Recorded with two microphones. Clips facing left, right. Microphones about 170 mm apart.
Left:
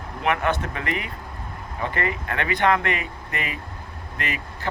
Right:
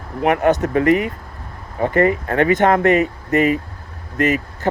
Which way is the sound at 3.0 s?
25° right (ahead or behind).